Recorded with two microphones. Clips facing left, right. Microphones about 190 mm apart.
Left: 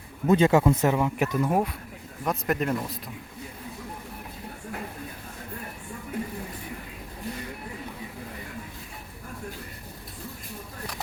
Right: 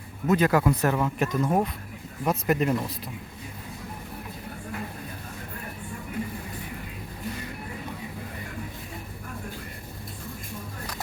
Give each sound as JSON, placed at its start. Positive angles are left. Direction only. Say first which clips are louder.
{"t": 0.3, "sound": "speech", "louder": "left 2 dB", "side_deg": 25}